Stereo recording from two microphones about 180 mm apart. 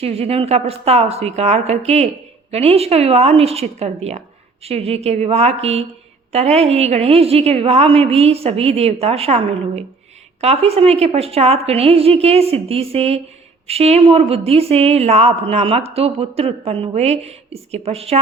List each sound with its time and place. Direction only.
0.0 s speech: 35° right (ahead or behind)